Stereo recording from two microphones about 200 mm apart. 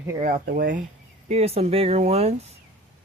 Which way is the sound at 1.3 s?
30° right (ahead or behind).